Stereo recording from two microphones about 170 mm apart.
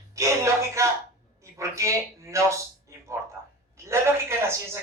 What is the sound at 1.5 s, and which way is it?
A man's voice, 15° right (ahead or behind).